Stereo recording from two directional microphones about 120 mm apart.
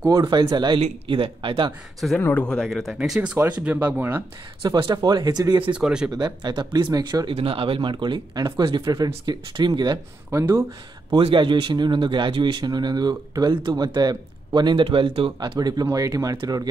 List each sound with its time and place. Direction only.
0.2 s a man's voice: 40° right (ahead or behind)
2.0 s speech: centre (ahead or behind)
3.2 s speech: 15° right (ahead or behind)
4.7 s a man's voice: 40° right (ahead or behind)
5.8 s speech: 5° right (ahead or behind)
6.1 s a man's voice: 35° right (ahead or behind)
7.3 s a man's voice: 50° right (ahead or behind)
10.3 s speech: 20° right (ahead or behind)
11.1 s a man's voice: 45° right (ahead or behind)